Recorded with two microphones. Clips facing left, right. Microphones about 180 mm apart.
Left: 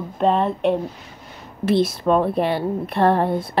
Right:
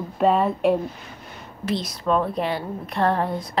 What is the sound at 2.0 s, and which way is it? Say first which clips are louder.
Speech: left 4 dB; 55° left (ahead or behind).